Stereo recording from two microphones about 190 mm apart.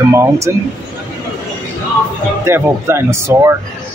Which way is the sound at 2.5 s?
15° right (ahead or behind).